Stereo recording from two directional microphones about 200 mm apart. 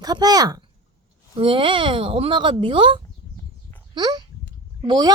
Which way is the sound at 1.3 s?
25° right (ahead or behind).